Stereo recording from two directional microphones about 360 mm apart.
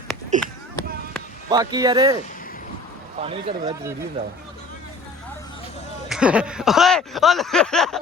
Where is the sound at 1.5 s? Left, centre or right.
Centre.